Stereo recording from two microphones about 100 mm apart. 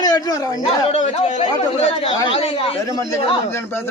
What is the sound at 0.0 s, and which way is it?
Speech, 40° left (ahead or behind).